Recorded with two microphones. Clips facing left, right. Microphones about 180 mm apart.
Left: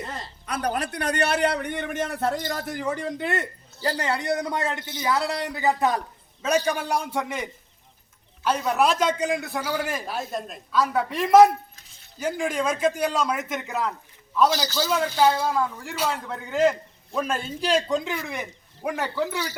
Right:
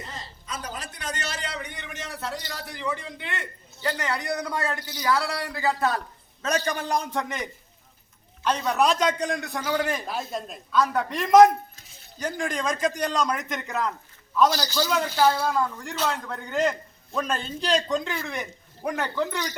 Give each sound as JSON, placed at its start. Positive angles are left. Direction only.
{"t": 0.1, "sound": "a man's voice", "side_deg": 65}